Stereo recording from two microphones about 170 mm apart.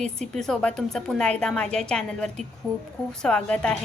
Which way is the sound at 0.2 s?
5° left (ahead or behind).